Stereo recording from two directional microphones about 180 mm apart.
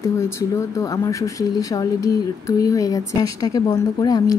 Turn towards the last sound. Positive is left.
turn(degrees=20)  # may be behind; listen again after turning